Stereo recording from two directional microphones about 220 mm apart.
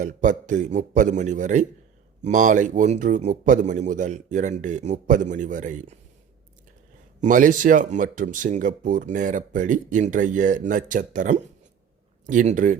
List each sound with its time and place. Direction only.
0.0 s speech: 35° right (ahead or behind)
7.2 s speech: 35° right (ahead or behind)